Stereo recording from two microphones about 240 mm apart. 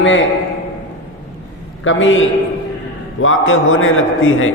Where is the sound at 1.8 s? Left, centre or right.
Left.